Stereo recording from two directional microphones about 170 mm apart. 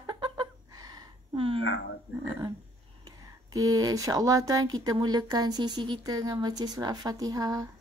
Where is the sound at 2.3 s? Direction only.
10° right (ahead or behind).